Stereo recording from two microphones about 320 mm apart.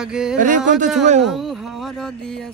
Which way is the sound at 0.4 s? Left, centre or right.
Right.